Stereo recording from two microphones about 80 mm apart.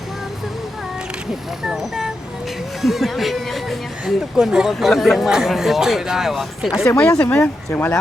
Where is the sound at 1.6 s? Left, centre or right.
Centre.